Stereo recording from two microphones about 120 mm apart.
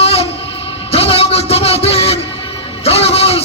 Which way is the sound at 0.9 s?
55° left (ahead or behind).